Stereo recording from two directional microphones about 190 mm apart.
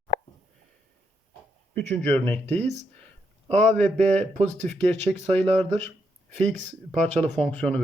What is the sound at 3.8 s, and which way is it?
Speech, 5° left (ahead or behind).